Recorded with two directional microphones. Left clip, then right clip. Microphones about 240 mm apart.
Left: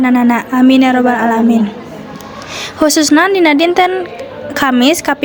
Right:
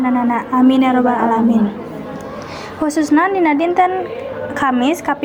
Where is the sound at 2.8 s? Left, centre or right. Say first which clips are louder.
Left 5 dB; left.